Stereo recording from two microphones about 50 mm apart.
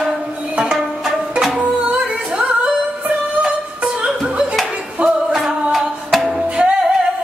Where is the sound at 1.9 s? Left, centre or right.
Right.